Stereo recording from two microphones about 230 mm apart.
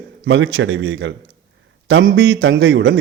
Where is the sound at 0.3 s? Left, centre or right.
Right.